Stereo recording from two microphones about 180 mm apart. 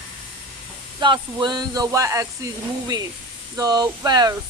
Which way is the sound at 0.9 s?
25° right (ahead or behind).